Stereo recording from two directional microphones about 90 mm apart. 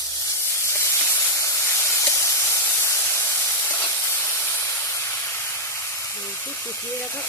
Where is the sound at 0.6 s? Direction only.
30° left (ahead or behind).